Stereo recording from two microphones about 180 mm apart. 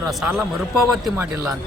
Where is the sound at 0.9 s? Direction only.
10° right (ahead or behind).